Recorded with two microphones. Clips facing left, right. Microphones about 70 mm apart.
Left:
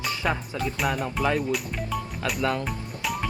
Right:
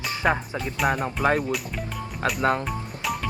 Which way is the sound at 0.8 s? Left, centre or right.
Right.